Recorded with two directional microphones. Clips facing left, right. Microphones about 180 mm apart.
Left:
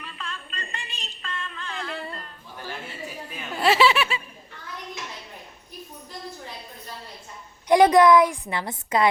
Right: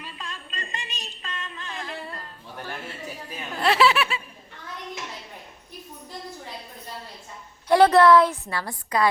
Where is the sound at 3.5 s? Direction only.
Centre (ahead or behind).